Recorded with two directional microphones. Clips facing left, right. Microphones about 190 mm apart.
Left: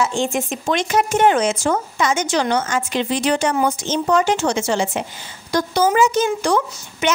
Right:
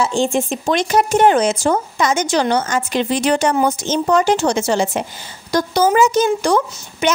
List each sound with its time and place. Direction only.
0.0 s speech: 35° right (ahead or behind)